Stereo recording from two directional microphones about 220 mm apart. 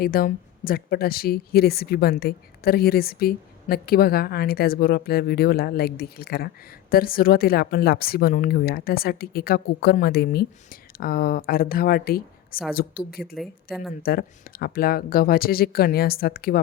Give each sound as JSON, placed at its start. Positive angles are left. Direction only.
{"t": 0.0, "sound": "speech", "side_deg": 40}
{"t": 13.3, "sound": "speech", "side_deg": 0}
{"t": 14.0, "sound": "speech", "side_deg": 40}